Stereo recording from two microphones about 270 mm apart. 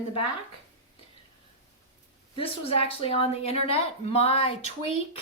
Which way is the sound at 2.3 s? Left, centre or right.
Left.